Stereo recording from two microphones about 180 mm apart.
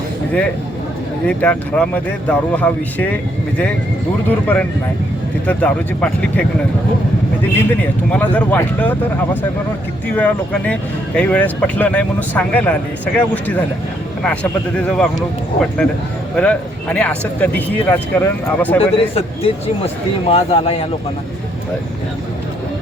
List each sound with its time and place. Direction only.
1.3 s speech: 5° left (ahead or behind)
4.3 s speech: 10° left (ahead or behind)
7.7 s speech: 10° left (ahead or behind)
16.3 s speech: 5° left (ahead or behind)
18.8 s speech: 35° left (ahead or behind)